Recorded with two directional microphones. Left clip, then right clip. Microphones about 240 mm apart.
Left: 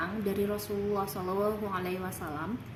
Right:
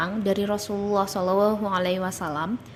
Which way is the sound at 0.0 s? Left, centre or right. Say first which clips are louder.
Right 7 dB; right.